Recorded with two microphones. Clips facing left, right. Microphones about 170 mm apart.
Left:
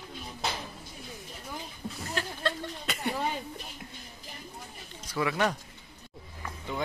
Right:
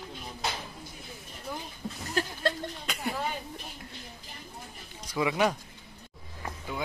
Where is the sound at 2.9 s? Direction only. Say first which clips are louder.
Left 2 dB; centre (ahead or behind).